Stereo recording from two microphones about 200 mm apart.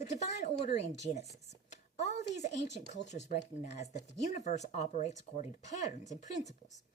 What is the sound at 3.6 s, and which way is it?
Speech, 35° left (ahead or behind).